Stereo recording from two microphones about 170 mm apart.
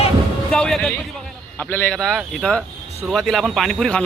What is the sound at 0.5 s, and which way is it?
Speech, 5° left (ahead or behind).